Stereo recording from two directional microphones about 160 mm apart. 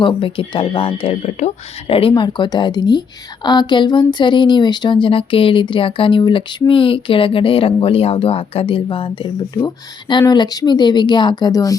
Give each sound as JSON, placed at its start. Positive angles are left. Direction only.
{"t": 0.0, "sound": "speech", "side_deg": 35}